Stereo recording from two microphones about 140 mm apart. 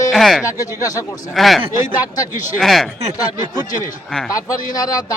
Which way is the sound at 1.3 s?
Centre (ahead or behind).